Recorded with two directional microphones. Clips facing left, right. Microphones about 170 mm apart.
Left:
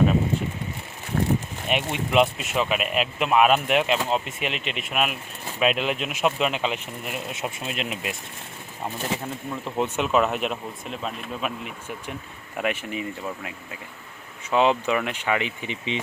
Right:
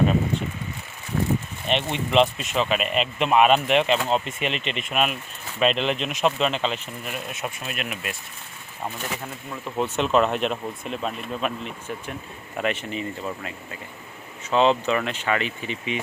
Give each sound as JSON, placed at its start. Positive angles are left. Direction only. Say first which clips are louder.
{"t": 1.1, "sound": "a sound", "louder": "left 1 dB", "side_deg": 45}
{"t": 1.7, "sound": "speech", "louder": "right 1 dB", "side_deg": 5}
{"t": 9.7, "sound": "speech", "louder": "right 1 dB", "side_deg": 10}